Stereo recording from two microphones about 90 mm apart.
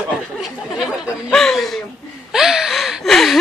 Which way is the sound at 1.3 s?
5° left (ahead or behind).